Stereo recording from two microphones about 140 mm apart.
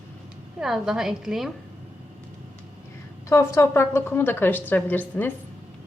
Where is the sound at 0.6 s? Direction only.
Centre (ahead or behind).